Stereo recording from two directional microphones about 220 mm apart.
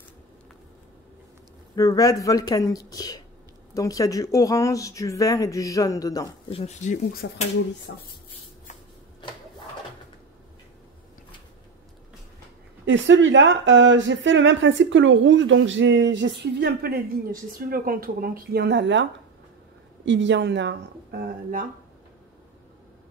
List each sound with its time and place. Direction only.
1.8 s speech: 15° left (ahead or behind)
6.6 s speech: 35° left (ahead or behind)
7.9 s speech: 50° left (ahead or behind)
12.8 s speech: 55° right (ahead or behind)
20.1 s speech: 55° right (ahead or behind)